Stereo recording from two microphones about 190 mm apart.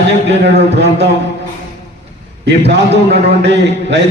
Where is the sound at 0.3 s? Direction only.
65° right (ahead or behind).